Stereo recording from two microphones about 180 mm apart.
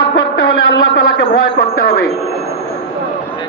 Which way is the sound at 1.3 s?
55° left (ahead or behind).